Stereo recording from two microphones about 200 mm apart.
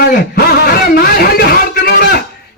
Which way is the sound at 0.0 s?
50° left (ahead or behind).